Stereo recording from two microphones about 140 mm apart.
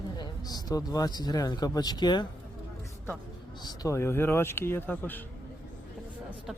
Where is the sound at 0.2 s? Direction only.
25° left (ahead or behind).